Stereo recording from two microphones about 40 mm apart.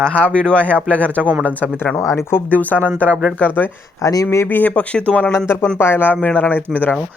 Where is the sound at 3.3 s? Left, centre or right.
Left.